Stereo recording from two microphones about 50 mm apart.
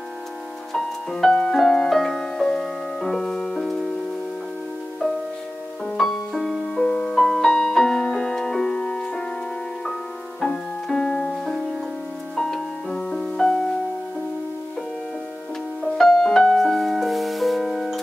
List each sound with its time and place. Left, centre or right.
0.7 s music: centre
5.9 s music: centre
10.4 s music: centre
12.4 s music: centre
15.8 s music: centre